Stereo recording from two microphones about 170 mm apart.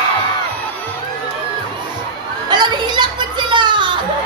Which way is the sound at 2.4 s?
25° right (ahead or behind).